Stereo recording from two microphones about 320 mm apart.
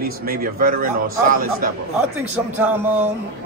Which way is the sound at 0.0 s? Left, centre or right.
Right.